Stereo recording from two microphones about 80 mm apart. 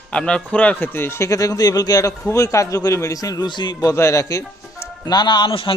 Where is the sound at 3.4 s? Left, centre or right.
Left.